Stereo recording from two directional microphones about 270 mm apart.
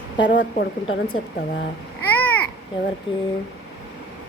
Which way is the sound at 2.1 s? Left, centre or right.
Centre.